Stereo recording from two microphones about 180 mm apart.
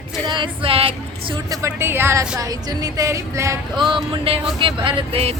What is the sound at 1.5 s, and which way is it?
Speech, 15° right (ahead or behind).